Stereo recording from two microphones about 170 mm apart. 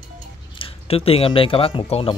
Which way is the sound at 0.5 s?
35° left (ahead or behind).